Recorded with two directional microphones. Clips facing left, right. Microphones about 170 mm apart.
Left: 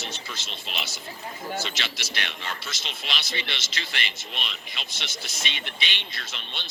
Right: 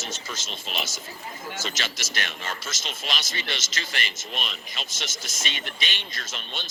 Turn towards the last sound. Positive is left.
turn(degrees=-45)  # may be behind; listen again after turning